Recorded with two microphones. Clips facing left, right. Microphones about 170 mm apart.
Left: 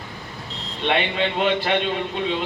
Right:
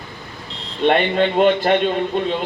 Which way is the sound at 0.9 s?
45° right (ahead or behind).